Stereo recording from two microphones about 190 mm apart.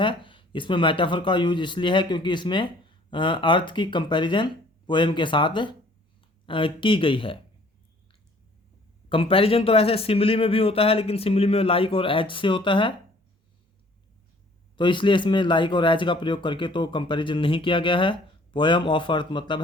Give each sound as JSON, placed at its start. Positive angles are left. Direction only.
{"t": 0.0, "sound": "speech", "side_deg": 25}
{"t": 9.0, "sound": "speech", "side_deg": 30}
{"t": 14.8, "sound": "speech", "side_deg": 25}